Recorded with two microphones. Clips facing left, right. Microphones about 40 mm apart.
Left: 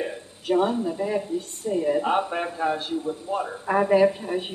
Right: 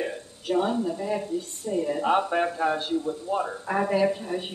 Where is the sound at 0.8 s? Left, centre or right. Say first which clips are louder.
Left 2 dB; centre.